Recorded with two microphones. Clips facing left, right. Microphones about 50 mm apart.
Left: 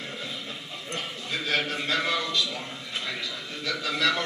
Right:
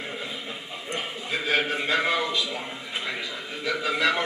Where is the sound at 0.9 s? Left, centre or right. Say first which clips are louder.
Right 3 dB; centre.